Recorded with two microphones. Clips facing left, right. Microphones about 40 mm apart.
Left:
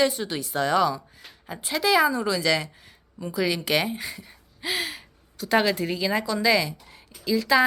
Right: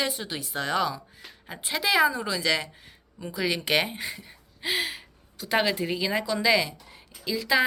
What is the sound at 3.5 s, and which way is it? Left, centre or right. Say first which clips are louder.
A woman's voice: left 1 dB; right.